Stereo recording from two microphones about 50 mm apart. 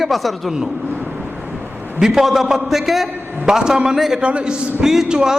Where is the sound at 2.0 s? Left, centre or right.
Centre.